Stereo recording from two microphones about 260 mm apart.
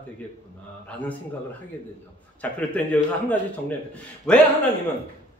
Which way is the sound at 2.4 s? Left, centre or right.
Centre.